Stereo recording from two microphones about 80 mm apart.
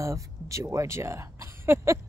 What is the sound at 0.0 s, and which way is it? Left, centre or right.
Speech, right.